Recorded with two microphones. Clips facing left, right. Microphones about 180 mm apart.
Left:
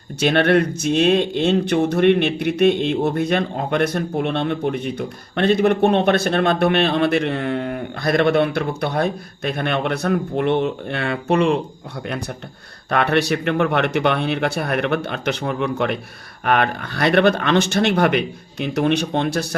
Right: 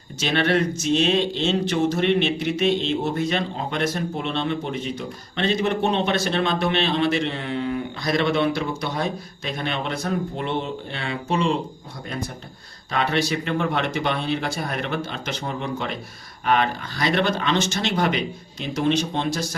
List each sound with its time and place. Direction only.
0.2 s speech: 55° left (ahead or behind)
12.9 s speech: 60° left (ahead or behind)